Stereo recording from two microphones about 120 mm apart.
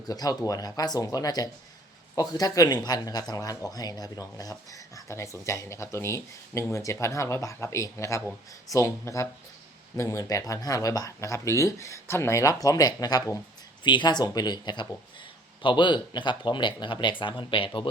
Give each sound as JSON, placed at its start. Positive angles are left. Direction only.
{"t": 0.1, "sound": "speech", "side_deg": 30}